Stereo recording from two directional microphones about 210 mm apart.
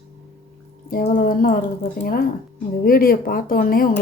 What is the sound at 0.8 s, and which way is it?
Speech, 40° left (ahead or behind).